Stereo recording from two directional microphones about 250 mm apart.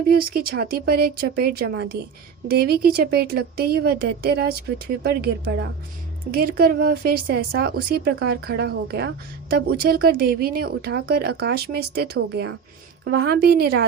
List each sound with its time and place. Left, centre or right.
0.1 s speech: right